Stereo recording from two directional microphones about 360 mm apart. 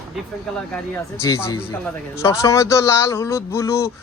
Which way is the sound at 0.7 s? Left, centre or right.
Centre.